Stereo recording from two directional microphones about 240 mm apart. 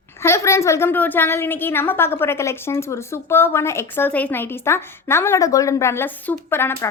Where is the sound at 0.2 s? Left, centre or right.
Centre.